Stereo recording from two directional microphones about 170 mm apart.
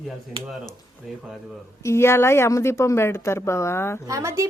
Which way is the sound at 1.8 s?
15° left (ahead or behind).